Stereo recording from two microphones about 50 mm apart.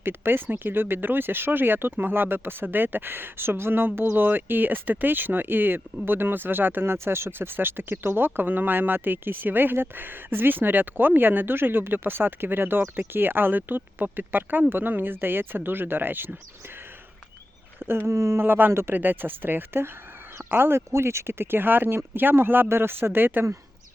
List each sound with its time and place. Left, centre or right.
0.0 s speech: right
17.7 s speech: right
18.1 s speech: right
18.3 s speech: right
18.7 s speech: right
18.9 s speech: right